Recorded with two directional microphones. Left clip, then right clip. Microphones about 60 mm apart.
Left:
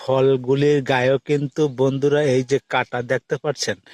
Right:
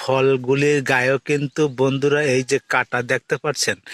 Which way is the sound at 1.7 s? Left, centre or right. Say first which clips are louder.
Left 1 dB; left.